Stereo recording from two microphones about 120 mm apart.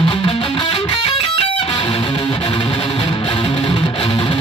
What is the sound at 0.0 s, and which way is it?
Music, 45° left (ahead or behind).